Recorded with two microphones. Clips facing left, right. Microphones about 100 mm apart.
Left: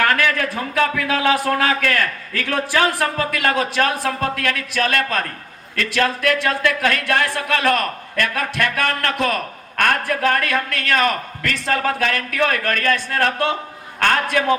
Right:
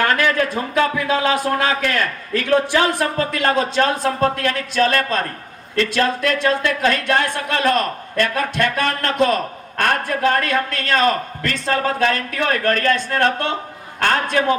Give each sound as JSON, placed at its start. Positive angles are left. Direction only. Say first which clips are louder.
{"t": 0.0, "sound": "speech", "louder": "right 1 dB", "side_deg": -25}